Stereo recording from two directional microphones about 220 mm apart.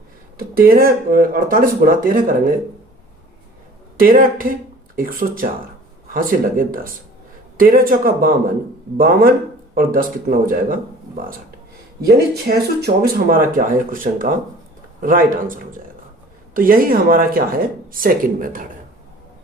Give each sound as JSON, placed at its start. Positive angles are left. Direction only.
{"t": 0.3, "sound": "speech", "side_deg": -40}
{"t": 3.9, "sound": "speech", "side_deg": -40}
{"t": 12.0, "sound": "speech", "side_deg": -45}